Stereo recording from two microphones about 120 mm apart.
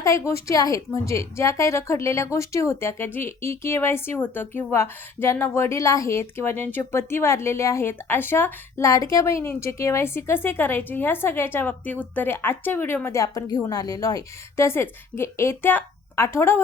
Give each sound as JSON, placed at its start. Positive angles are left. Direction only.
{"t": 0.0, "sound": "a woman's voice", "side_deg": 25}